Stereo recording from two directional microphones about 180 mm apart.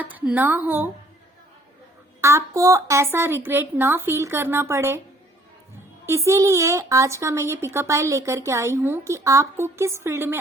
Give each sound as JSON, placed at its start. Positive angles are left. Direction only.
{"t": 0.0, "sound": "speech", "side_deg": -10}
{"t": 2.2, "sound": "speech", "side_deg": -15}
{"t": 6.1, "sound": "speech", "side_deg": -15}